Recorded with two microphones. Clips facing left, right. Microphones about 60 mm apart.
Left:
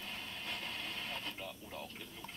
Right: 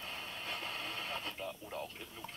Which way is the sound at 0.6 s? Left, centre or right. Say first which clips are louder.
Right 2 dB; centre.